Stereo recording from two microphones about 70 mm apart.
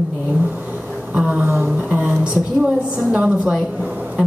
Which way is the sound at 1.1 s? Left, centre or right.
Right.